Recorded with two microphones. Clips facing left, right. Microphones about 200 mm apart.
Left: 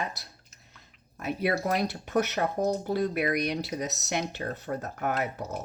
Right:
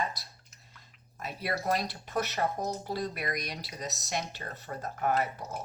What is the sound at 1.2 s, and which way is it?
Speech, 55° left (ahead or behind).